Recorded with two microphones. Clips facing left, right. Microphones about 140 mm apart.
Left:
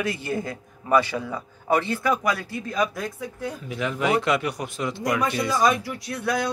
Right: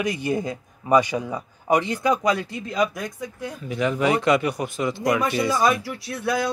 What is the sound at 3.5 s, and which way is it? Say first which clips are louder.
Speech: right 5 dB; centre (ahead or behind).